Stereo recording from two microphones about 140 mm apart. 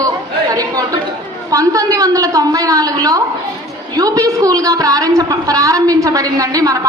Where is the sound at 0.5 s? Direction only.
25° right (ahead or behind).